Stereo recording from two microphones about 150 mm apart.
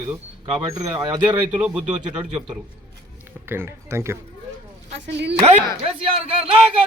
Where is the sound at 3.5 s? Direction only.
15° right (ahead or behind).